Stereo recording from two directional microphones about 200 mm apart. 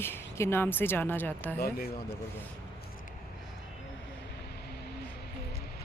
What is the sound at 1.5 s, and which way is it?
Speech, 50° left (ahead or behind).